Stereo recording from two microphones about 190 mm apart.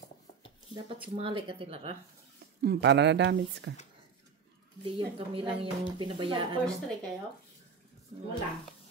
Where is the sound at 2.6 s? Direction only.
60° right (ahead or behind).